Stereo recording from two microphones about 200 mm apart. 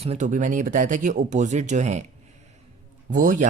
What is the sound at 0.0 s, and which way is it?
Speech, 35° right (ahead or behind).